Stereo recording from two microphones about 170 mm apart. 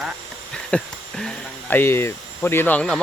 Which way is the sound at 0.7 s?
5° left (ahead or behind).